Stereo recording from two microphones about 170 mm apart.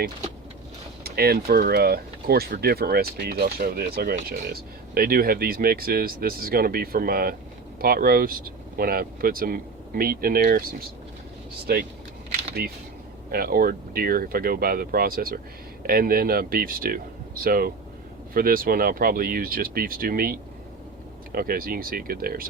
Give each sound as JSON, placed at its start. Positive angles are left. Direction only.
{"t": 1.0, "sound": "speech", "side_deg": -65}
{"t": 21.3, "sound": "speech", "side_deg": -60}